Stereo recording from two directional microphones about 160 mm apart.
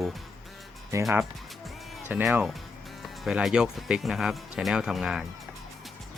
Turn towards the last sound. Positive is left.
turn(degrees=0)  # may be behind; listen again after turning